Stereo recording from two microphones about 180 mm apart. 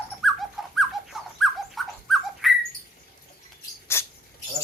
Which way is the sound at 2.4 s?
Centre (ahead or behind).